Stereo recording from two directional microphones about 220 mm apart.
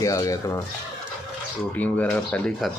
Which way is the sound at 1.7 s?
5° left (ahead or behind).